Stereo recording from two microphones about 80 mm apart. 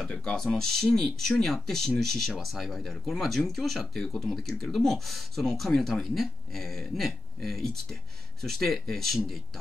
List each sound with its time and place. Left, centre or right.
0.0 s speech: centre